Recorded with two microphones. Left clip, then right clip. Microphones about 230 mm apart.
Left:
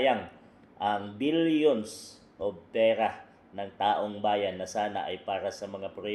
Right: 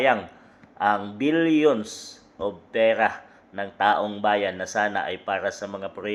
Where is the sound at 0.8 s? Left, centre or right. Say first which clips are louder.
Right 7 dB; right.